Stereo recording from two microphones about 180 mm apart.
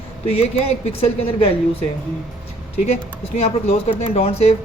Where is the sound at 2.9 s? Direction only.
35° left (ahead or behind).